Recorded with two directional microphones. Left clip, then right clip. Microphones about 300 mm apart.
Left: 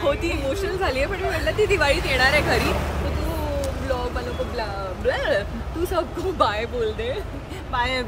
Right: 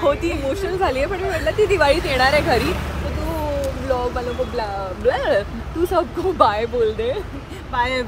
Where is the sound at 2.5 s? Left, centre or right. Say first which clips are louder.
Right 2 dB; left.